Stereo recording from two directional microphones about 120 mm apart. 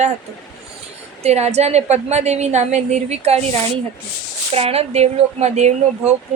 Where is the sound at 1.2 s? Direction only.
60° right (ahead or behind).